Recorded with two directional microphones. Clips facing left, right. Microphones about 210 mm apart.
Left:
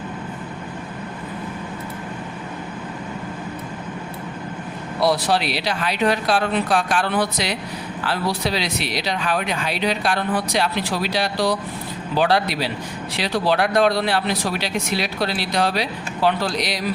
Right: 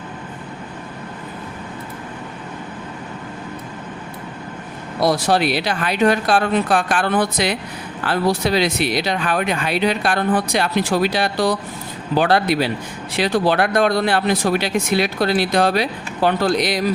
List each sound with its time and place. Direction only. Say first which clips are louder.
4.9 s speech: right 2 dB; 45° right (ahead or behind)